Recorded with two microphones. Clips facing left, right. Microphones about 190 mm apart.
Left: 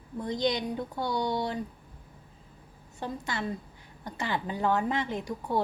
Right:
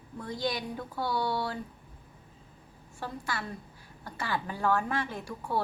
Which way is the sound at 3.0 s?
20° left (ahead or behind).